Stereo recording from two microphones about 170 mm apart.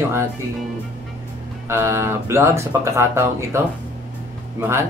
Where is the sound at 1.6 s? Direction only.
15° right (ahead or behind).